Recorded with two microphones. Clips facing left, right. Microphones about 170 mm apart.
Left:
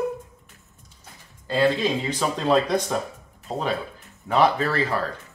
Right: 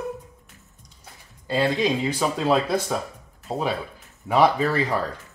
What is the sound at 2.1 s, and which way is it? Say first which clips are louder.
Speech: even; 5° right (ahead or behind).